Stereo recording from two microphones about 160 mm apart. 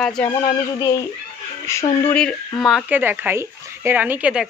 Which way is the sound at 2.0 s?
5° left (ahead or behind).